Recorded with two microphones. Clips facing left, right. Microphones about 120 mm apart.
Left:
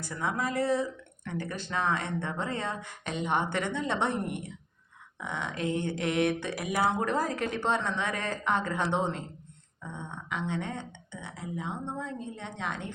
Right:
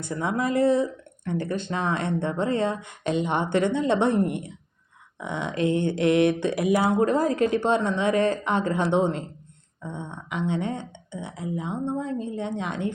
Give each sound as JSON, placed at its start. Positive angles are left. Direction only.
{"t": 0.0, "sound": "speech", "side_deg": -60}
{"t": 9.8, "sound": "a sound", "side_deg": -20}
{"t": 10.5, "sound": "speech", "side_deg": -55}